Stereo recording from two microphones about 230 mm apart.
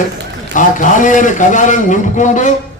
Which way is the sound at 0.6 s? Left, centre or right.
Left.